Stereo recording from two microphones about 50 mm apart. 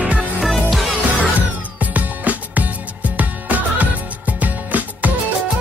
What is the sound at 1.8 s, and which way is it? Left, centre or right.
Music, right.